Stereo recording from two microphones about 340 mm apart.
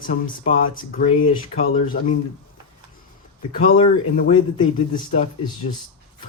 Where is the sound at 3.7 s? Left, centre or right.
Left.